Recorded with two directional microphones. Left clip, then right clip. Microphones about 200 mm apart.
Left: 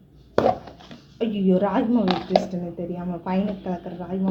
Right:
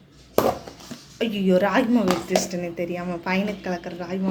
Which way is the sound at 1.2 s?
30° left (ahead or behind).